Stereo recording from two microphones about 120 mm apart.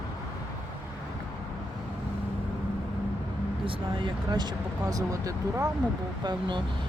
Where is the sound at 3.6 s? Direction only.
45° right (ahead or behind).